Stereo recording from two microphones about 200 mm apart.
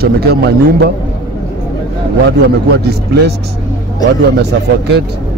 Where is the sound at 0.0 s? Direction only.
55° right (ahead or behind).